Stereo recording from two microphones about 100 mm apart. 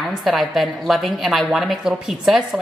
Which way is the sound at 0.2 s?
Centre (ahead or behind).